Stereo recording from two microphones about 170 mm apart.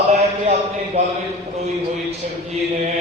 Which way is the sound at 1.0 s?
35° right (ahead or behind).